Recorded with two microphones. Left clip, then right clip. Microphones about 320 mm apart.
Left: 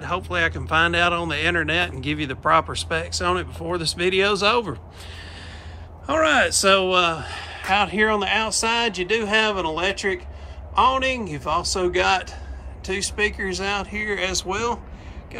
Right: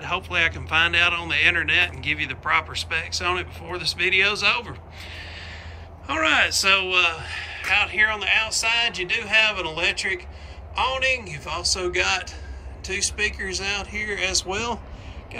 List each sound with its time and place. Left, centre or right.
0.0 s speech: centre